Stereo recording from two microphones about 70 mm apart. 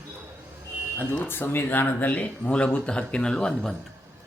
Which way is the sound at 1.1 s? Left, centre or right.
Left.